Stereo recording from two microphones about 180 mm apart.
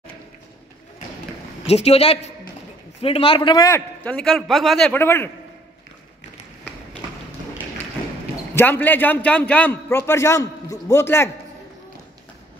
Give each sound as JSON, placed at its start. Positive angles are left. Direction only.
{"t": 1.7, "sound": "a man's voice", "side_deg": 35}
{"t": 8.5, "sound": "a man's voice", "side_deg": 10}